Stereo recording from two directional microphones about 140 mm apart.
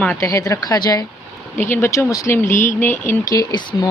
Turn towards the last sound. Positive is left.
turn(degrees=25)  # may be behind; listen again after turning